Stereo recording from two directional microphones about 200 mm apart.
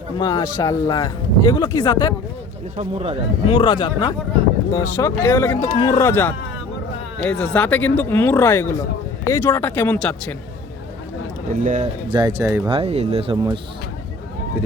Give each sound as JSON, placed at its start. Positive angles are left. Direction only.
{"t": 0.2, "sound": "speech", "side_deg": 20}
{"t": 2.7, "sound": "speech", "side_deg": -30}
{"t": 3.4, "sound": "speech", "side_deg": 25}
{"t": 5.6, "sound": "speech", "side_deg": 20}
{"t": 11.6, "sound": "speech", "side_deg": -40}
{"t": 12.0, "sound": "speech", "side_deg": -20}
{"t": 12.7, "sound": "speech", "side_deg": -30}
{"t": 13.3, "sound": "speech", "side_deg": -20}